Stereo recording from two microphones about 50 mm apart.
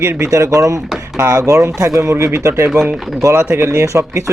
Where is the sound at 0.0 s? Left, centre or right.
Right.